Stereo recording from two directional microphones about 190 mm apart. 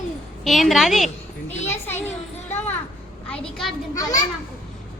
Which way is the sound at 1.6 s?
10° left (ahead or behind).